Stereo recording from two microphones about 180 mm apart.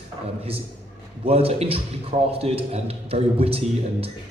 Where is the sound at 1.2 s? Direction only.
35° right (ahead or behind).